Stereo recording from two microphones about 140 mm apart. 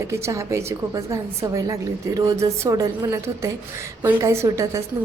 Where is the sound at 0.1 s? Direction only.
20° right (ahead or behind).